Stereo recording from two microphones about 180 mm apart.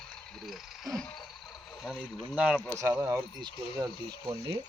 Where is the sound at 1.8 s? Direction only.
5° right (ahead or behind); by 4.5 s 20° right (ahead or behind).